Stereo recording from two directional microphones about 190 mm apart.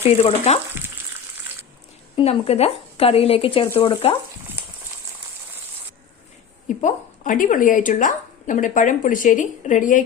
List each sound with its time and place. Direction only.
0.0 s speech: 30° left (ahead or behind)
2.1 s speech: 30° left (ahead or behind)
6.7 s a woman's voice: 45° left (ahead or behind)